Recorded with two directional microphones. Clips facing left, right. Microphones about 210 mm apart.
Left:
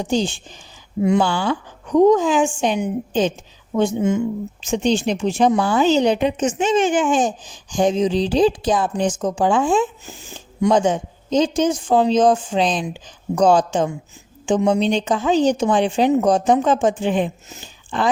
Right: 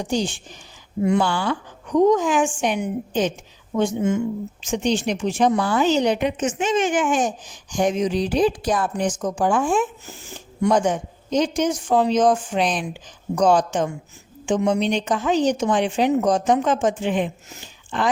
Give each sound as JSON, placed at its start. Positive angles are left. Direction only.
{"t": 0.0, "sound": "a woman's voice", "side_deg": 25}